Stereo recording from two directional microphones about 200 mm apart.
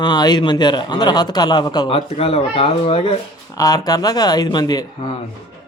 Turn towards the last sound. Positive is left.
turn(degrees=20)  # may be behind; listen again after turning